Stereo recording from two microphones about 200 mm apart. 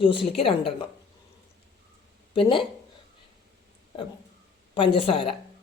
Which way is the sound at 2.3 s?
25° left (ahead or behind).